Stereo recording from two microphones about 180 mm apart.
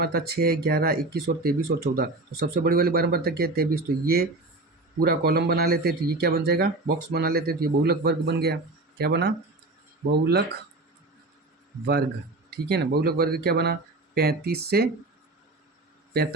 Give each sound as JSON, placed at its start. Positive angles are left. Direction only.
{"t": 0.0, "sound": "speech", "side_deg": -60}
{"t": 12.5, "sound": "speech", "side_deg": -65}